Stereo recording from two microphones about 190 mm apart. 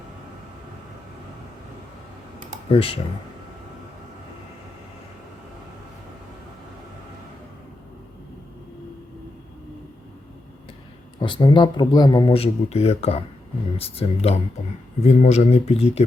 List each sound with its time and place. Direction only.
2.6 s speech: 30° left (ahead or behind)
11.2 s speech: 25° left (ahead or behind)